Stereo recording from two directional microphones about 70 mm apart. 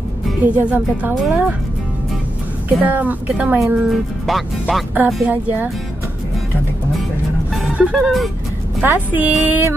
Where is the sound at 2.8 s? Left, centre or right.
Right.